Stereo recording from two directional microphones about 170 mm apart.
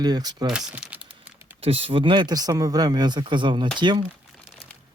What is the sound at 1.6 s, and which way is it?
Speech, 35° right (ahead or behind).